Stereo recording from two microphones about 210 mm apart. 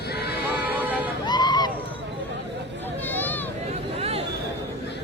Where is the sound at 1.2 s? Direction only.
20° left (ahead or behind).